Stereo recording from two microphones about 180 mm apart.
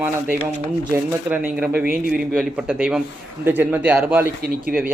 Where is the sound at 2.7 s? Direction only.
10° right (ahead or behind).